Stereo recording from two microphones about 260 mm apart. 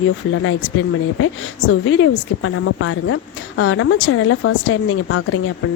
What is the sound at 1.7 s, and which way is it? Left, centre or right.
Speech, left.